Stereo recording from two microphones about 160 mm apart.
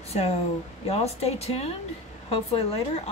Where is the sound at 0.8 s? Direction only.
40° left (ahead or behind).